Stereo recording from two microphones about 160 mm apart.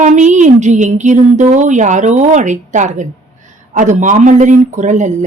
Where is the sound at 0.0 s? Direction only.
50° right (ahead or behind).